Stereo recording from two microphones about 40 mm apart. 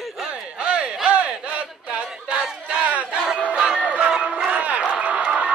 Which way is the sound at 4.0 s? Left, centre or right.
Right.